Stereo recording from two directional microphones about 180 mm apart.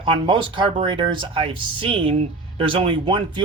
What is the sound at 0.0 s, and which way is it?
Speech, 25° right (ahead or behind).